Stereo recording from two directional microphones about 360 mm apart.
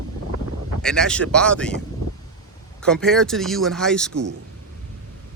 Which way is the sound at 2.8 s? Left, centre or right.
Centre.